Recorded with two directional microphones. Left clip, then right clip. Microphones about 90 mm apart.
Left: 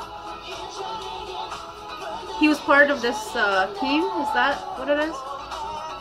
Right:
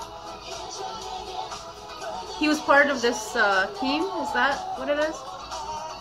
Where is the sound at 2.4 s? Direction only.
15° left (ahead or behind).